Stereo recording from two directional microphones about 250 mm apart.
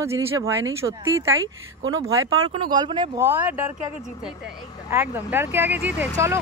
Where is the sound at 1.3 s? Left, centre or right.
Right.